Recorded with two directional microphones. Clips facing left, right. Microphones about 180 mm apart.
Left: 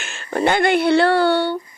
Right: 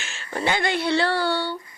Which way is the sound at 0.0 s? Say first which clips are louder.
Left 4 dB; 55° left (ahead or behind).